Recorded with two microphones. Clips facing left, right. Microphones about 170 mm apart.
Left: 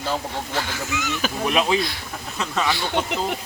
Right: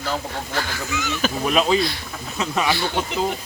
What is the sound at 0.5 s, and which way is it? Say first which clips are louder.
Speech: right 1 dB; 20° left (ahead or behind).